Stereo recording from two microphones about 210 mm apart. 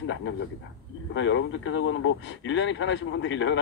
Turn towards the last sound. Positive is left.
turn(degrees=65)  # may be behind; listen again after turning